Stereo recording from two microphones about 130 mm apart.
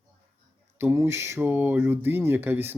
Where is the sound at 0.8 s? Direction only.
20° right (ahead or behind).